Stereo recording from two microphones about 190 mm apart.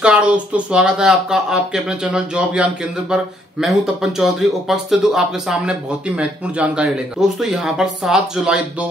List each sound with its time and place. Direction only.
0.0 s speech: 5° right (ahead or behind)